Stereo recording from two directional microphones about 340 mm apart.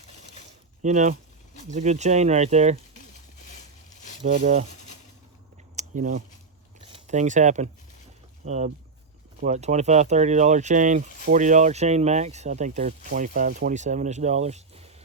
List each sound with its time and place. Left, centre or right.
0.8 s speech: right
4.4 s speech: centre
5.7 s a sound: right
6.8 s speech: centre